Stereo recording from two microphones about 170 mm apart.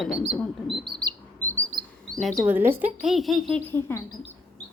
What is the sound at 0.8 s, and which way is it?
Bird, 25° right (ahead or behind).